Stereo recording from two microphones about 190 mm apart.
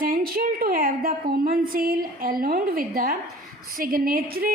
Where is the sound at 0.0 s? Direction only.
50° right (ahead or behind).